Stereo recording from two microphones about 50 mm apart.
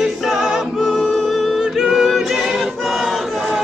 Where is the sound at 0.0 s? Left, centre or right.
Centre.